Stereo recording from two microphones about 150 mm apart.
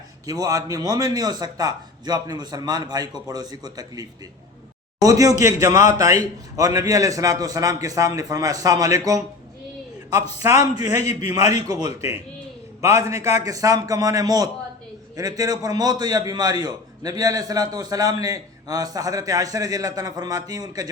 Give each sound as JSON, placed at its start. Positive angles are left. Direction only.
{"t": 0.3, "sound": "a man's voice", "side_deg": -25}
{"t": 11.0, "sound": "a man's voice", "side_deg": 45}
{"t": 11.3, "sound": "a man's voice", "side_deg": -25}